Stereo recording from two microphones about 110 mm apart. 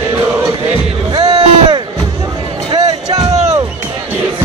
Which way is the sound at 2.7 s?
35° right (ahead or behind).